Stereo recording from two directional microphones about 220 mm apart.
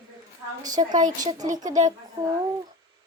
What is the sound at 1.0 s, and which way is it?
Speech, 35° right (ahead or behind).